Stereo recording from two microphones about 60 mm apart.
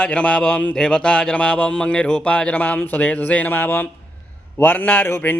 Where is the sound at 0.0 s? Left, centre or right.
Centre.